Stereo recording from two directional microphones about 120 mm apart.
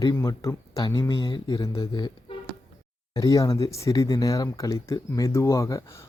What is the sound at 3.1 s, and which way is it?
Speech, 30° left (ahead or behind).